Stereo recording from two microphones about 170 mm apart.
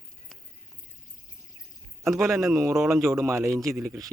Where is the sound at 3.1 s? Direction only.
15° right (ahead or behind).